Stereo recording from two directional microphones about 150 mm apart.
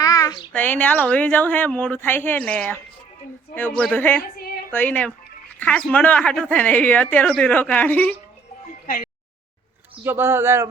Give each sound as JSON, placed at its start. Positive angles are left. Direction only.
{"t": 0.0, "sound": "a sound", "side_deg": 25}
{"t": 0.5, "sound": "a woman's voice", "side_deg": 10}
{"t": 10.0, "sound": "speech", "side_deg": -15}